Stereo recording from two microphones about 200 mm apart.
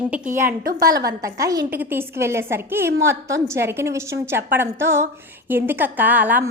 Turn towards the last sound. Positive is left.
turn(degrees=-10)  # may be behind; listen again after turning